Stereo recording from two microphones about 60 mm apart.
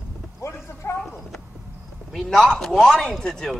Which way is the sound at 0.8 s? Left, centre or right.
Left.